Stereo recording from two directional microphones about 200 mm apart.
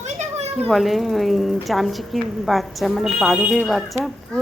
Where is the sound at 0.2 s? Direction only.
35° right (ahead or behind).